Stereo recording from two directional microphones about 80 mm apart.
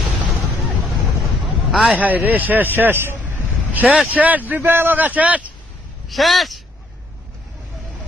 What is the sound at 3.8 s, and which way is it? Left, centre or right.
A man's voice, centre.